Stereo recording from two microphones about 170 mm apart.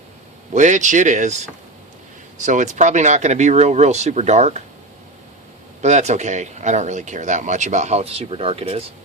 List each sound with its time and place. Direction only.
0.5 s speech: 45° right (ahead or behind)
2.4 s speech: 45° right (ahead or behind)
5.8 s speech: 40° right (ahead or behind)